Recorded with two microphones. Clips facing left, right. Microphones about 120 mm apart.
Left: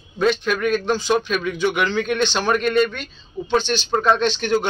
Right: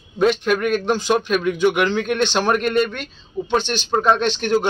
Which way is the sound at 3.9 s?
10° right (ahead or behind).